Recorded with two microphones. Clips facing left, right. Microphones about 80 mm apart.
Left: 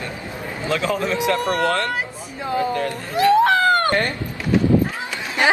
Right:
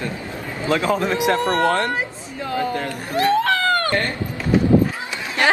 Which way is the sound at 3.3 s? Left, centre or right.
Left.